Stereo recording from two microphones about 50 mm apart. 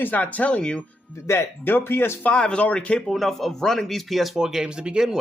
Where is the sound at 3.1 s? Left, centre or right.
Centre.